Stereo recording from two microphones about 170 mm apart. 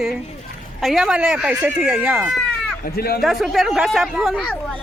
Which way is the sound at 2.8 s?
65° left (ahead or behind).